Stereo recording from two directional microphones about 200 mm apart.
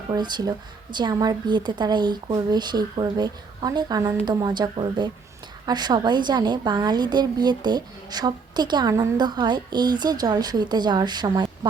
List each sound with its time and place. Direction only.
0.1 s a woman's voice: 20° right (ahead or behind)